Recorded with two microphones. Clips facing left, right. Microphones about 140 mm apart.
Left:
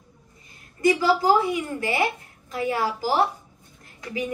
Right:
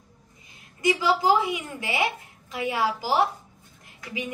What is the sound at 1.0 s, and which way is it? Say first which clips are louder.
A woman's voice: even; 50° left (ahead or behind).